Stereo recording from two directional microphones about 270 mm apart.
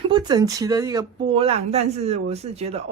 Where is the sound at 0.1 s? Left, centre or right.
Centre.